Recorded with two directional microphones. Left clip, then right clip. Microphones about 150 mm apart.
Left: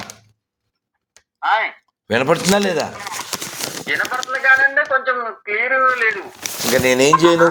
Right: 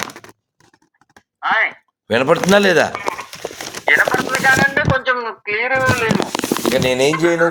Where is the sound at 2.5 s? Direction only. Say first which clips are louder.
Right 6 dB; 25° right (ahead or behind).